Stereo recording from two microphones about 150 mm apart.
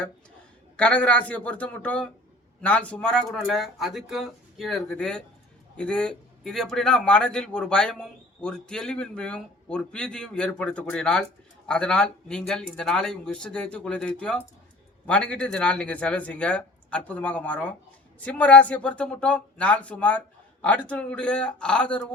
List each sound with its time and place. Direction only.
0.8 s a man's voice: 10° left (ahead or behind)